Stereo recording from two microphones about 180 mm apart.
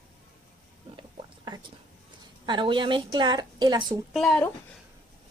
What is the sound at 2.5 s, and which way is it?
A woman's voice, 25° right (ahead or behind).